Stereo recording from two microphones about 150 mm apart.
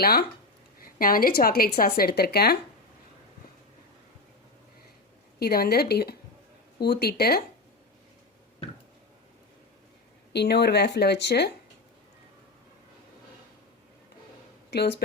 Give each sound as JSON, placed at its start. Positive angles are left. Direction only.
{"t": 0.0, "sound": "speech", "side_deg": 90}
{"t": 0.9, "sound": "a woman's voice", "side_deg": 70}
{"t": 5.4, "sound": "speech", "side_deg": 90}
{"t": 10.3, "sound": "speech", "side_deg": 90}
{"t": 14.7, "sound": "speech", "side_deg": 90}